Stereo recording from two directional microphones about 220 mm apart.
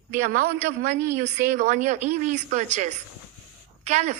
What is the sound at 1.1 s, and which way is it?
A woman's voice, 50° right (ahead or behind).